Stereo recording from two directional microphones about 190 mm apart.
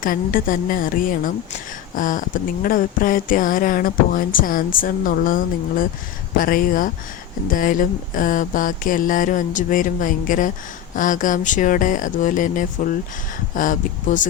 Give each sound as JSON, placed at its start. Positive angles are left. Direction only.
{"t": 0.0, "sound": "speech", "side_deg": 45}